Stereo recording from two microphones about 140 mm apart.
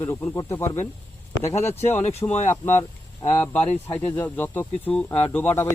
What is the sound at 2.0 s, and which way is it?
Speech, 50° left (ahead or behind).